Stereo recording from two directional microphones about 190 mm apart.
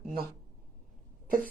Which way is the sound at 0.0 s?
50° right (ahead or behind).